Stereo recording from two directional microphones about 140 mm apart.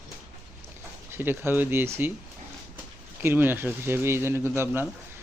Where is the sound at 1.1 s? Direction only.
15° right (ahead or behind).